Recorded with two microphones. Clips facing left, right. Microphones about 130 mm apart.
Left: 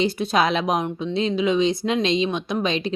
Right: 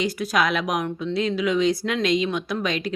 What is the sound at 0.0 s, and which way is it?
Speech, 25° left (ahead or behind).